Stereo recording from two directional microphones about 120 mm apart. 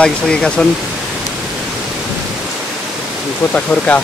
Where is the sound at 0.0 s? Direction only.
5° left (ahead or behind).